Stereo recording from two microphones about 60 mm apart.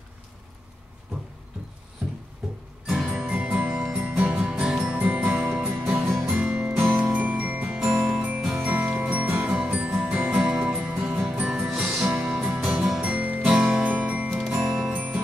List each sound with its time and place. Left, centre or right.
2.9 s music: centre
5.7 s music: right
6.2 s music: centre
7.7 s music: centre
8.6 s music: right
11.7 s music: centre
13.0 s music: right
13.4 s music: centre
13.8 s music: right
14.4 s music: centre